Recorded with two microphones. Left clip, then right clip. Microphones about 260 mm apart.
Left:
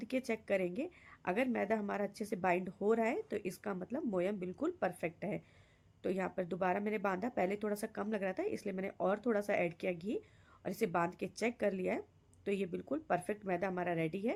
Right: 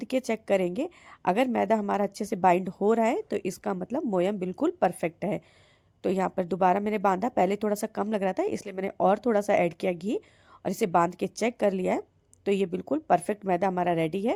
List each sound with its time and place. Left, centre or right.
0.0 s a woman's voice: right